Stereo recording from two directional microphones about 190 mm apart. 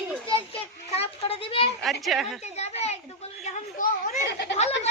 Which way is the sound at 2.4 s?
35° left (ahead or behind).